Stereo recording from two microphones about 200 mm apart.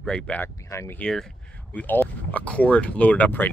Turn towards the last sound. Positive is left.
turn(degrees=10)  # may be behind; listen again after turning